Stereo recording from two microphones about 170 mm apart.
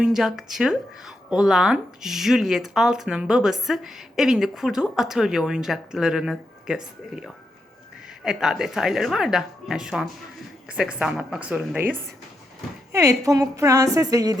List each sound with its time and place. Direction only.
0.0 s a woman's voice: 5° right (ahead or behind); by 14.3 s 20° right (ahead or behind)